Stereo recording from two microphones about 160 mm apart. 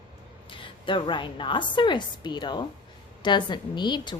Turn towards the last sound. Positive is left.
turn(degrees=30)  # may be behind; listen again after turning